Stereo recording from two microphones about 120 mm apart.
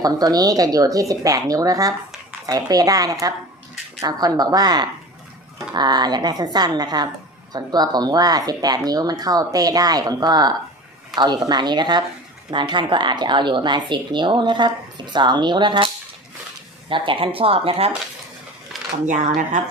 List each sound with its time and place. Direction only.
0.0 s a woman's voice: 30° right (ahead or behind)
16.9 s speech: 45° right (ahead or behind)
19.0 s speech: 90° right